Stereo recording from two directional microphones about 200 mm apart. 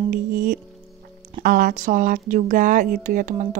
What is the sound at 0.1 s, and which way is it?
Speech, 40° right (ahead or behind).